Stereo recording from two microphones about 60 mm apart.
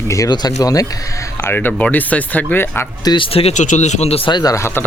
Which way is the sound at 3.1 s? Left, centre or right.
Left.